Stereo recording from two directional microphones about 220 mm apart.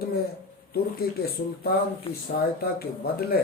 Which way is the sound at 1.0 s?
45° left (ahead or behind).